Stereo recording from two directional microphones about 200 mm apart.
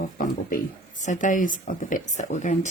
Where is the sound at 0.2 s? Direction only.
40° left (ahead or behind).